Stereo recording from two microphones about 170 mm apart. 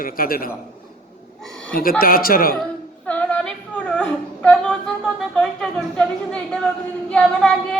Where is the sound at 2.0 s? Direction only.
60° left (ahead or behind).